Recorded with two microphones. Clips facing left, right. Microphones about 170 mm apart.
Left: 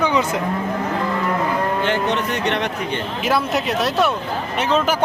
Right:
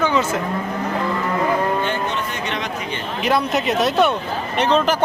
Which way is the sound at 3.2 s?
Centre (ahead or behind).